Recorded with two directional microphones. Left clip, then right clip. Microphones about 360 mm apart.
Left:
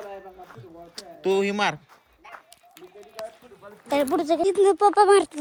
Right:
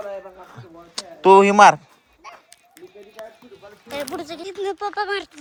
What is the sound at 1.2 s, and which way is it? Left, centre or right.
Speech, centre.